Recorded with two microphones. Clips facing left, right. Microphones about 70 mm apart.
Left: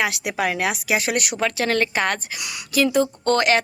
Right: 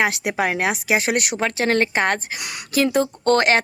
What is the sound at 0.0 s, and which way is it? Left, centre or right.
A woman's voice, right.